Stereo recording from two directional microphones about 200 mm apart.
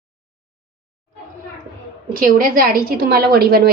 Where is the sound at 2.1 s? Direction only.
45° right (ahead or behind).